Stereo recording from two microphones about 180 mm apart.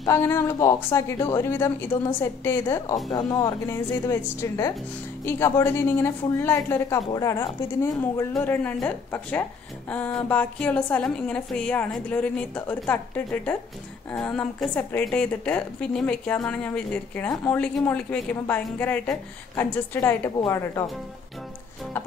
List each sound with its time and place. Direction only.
0.0 s a woman's voice: 15° left (ahead or behind)